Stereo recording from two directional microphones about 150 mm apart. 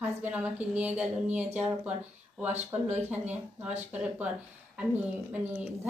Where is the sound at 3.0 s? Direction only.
10° right (ahead or behind).